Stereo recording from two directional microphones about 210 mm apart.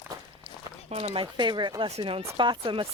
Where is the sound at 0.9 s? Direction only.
30° right (ahead or behind).